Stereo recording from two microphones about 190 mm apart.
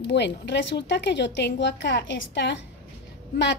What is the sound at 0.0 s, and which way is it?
A woman's voice, 65° left (ahead or behind).